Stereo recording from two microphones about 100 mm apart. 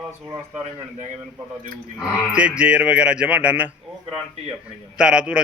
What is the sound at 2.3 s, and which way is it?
A man's voice, 10° right (ahead or behind).